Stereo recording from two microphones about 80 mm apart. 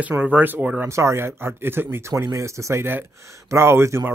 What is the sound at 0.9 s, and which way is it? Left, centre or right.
Speech, right.